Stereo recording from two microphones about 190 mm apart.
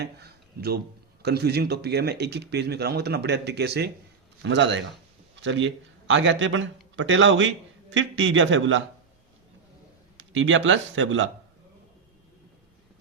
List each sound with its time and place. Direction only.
0.0 s a sound: 60° right (ahead or behind)
1.2 s a man's voice: 60° right (ahead or behind); by 8.8 s 85° right
10.2 s a man's voice: 80° right